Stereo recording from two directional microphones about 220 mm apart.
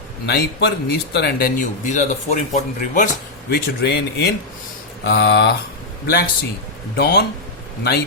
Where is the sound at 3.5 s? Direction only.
45° left (ahead or behind).